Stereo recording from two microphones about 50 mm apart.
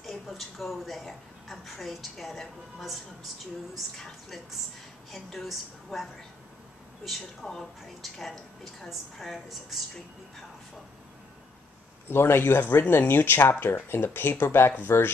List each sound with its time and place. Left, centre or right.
0.0 s a woman's voice: centre
7.1 s a woman's voice: centre
12.1 s speech: left
14.9 s speech: left